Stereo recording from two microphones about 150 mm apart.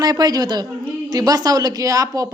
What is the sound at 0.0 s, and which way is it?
Speech, 25° right (ahead or behind).